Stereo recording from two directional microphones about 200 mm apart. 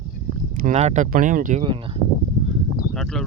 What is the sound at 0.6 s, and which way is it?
Speech, 35° right (ahead or behind).